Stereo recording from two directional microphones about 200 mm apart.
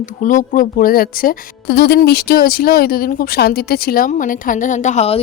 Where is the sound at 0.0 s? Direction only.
40° left (ahead or behind).